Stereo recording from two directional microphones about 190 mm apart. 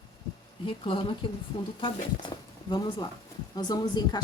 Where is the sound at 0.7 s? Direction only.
25° left (ahead or behind).